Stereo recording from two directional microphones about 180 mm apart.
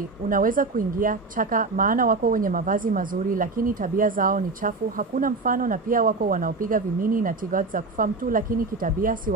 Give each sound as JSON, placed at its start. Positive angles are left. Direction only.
{"t": 0.3, "sound": "a woman's voice", "side_deg": -50}